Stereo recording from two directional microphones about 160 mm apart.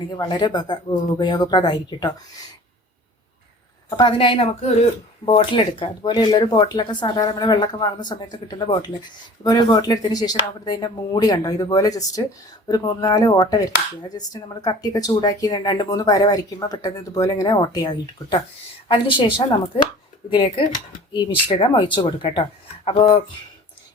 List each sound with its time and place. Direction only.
0.1 s a woman's voice: 30° left (ahead or behind)
3.8 s a woman's voice: 30° left (ahead or behind)
20.3 s a woman's voice: 30° left (ahead or behind)